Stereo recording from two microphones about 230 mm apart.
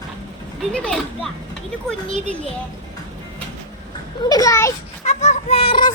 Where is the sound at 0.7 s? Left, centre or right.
Centre.